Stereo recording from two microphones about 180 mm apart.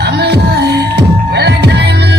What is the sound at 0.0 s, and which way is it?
Music, 65° right (ahead or behind).